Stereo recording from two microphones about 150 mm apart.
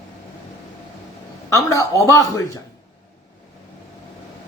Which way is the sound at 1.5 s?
20° left (ahead or behind).